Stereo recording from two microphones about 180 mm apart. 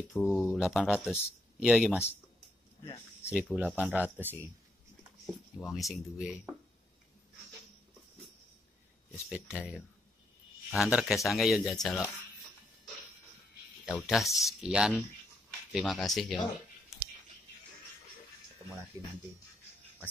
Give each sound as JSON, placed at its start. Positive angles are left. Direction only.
{"t": 0.1, "sound": "speech", "side_deg": 0}
{"t": 2.8, "sound": "a sound", "side_deg": 20}
{"t": 3.3, "sound": "speech", "side_deg": -5}
{"t": 5.2, "sound": "speech", "side_deg": 0}
{"t": 9.3, "sound": "speech", "side_deg": -5}
{"t": 14.0, "sound": "speech", "side_deg": 0}
{"t": 18.9, "sound": "speech", "side_deg": -15}